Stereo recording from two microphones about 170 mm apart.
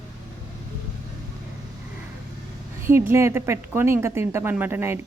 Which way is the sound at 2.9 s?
15° right (ahead or behind).